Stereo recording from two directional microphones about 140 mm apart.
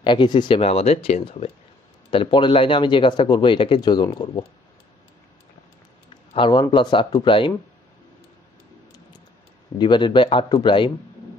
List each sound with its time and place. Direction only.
0.0 s speech: 35° left (ahead or behind)
6.3 s speech: 35° left (ahead or behind)
9.8 s speech: 35° left (ahead or behind)